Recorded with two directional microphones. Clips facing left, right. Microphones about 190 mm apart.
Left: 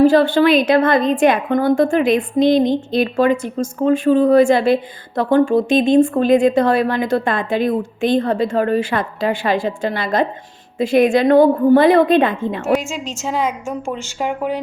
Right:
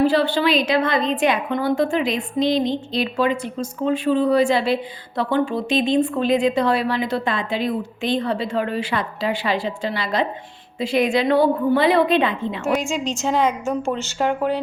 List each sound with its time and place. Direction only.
0.0 s a woman's voice: 45° left (ahead or behind)
12.8 s a woman's voice: 5° left (ahead or behind)